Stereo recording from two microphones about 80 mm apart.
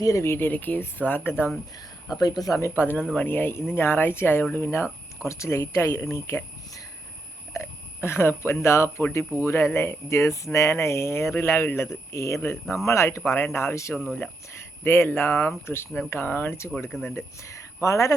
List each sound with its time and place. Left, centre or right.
0.0 s speech: left
2.1 s speech: left
12.4 s speech: left
12.7 s speech: left
13.9 s speech: centre
14.5 s speech: left